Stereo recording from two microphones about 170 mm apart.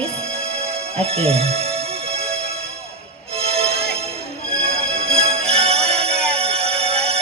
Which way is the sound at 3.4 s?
35° right (ahead or behind).